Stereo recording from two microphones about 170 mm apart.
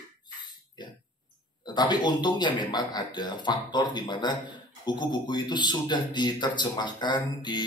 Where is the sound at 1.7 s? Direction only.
25° left (ahead or behind).